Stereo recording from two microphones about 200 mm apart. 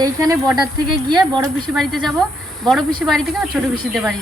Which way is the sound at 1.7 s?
Centre (ahead or behind).